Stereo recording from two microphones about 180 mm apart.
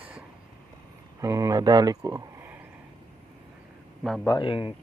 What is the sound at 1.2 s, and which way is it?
Speech, 20° right (ahead or behind).